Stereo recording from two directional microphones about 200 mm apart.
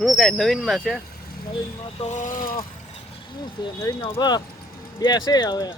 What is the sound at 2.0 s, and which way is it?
Speech, 40° left (ahead or behind).